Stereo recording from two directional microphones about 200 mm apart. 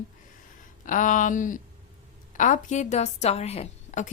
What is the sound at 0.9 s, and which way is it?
A woman's voice, 40° left (ahead or behind).